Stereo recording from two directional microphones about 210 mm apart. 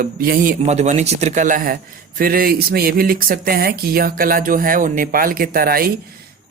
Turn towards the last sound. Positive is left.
turn(degrees=-45)  # may be behind; listen again after turning